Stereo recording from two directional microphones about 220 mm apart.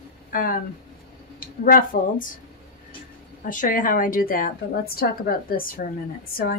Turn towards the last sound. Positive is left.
turn(degrees=45)  # may be behind; listen again after turning